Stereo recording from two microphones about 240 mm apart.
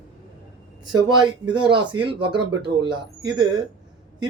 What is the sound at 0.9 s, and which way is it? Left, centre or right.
Speech, centre.